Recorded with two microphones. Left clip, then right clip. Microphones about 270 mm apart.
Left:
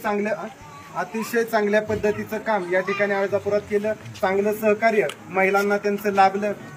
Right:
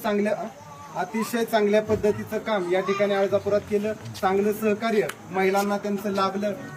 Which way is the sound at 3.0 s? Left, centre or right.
Left.